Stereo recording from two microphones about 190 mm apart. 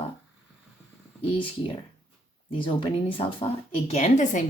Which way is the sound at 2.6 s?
30° left (ahead or behind).